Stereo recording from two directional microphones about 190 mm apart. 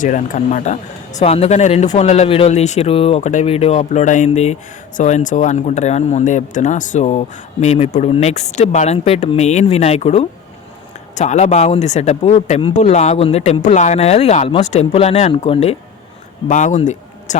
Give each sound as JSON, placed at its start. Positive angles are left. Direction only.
{"t": 0.0, "sound": "speech", "side_deg": 40}
{"t": 16.5, "sound": "speech", "side_deg": 40}